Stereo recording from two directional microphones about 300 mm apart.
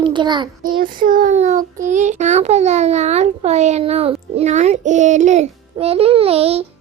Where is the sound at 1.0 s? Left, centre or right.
Right.